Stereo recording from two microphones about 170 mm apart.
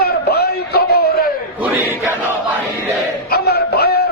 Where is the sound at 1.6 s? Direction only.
10° right (ahead or behind).